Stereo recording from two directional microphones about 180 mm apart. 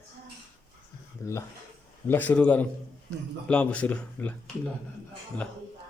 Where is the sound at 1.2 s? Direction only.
15° left (ahead or behind).